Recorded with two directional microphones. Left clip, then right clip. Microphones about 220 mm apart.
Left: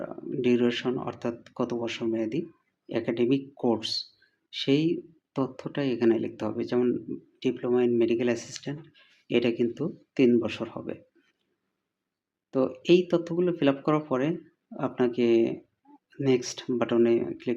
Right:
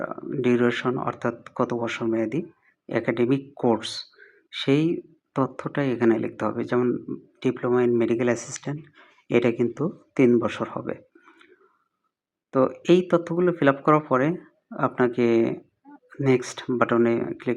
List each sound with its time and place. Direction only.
0.0 s speech: 15° right (ahead or behind)
12.5 s speech: 15° right (ahead or behind)